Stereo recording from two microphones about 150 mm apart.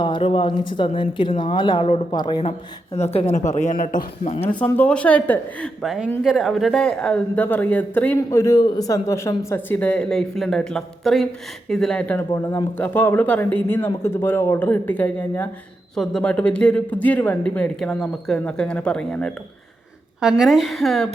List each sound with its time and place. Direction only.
0.0 s speech: 35° left (ahead or behind)
2.5 s speech: 45° left (ahead or behind); by 4.3 s 65° left (ahead or behind)
4.4 s a woman's voice: 10° left (ahead or behind)